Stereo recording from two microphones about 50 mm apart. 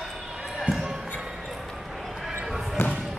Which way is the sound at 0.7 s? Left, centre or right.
Centre.